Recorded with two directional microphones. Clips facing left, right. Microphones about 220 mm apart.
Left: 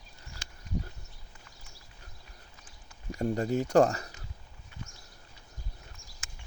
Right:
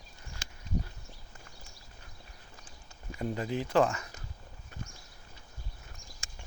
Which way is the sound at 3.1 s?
40° left (ahead or behind).